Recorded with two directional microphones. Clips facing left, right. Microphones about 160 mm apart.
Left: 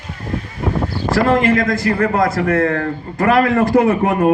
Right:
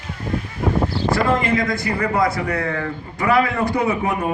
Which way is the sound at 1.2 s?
55° left (ahead or behind).